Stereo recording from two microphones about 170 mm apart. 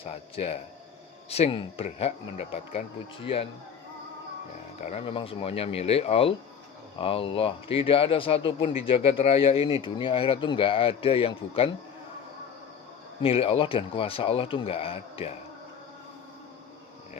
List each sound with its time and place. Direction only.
0.0 s speech: 35° left (ahead or behind)
4.8 s speech: 40° left (ahead or behind)
13.2 s speech: 35° left (ahead or behind)